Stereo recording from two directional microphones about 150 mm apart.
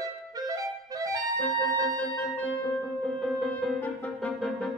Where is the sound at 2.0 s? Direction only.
10° left (ahead or behind).